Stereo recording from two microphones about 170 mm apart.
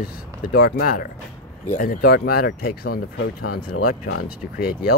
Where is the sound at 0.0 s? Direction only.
65° left (ahead or behind).